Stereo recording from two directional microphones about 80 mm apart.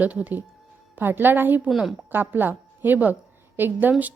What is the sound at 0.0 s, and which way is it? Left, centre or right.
Speech, centre.